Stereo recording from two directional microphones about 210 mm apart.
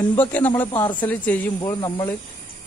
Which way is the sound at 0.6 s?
20° left (ahead or behind).